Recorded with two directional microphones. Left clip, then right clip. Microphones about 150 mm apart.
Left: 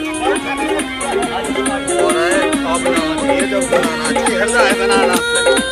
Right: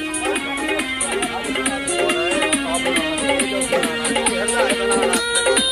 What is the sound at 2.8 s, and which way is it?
Music, 40° right (ahead or behind).